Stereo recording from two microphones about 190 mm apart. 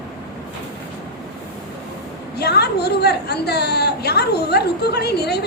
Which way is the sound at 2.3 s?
60° left (ahead or behind).